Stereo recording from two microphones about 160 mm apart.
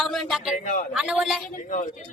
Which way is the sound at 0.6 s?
50° left (ahead or behind).